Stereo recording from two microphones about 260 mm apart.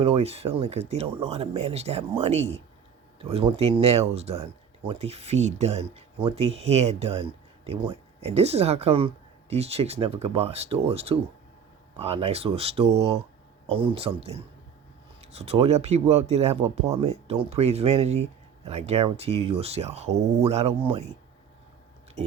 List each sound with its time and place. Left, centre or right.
0.0 s speech: right